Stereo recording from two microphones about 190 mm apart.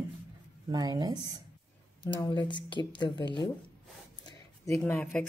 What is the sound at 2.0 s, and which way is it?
Speech, 25° left (ahead or behind).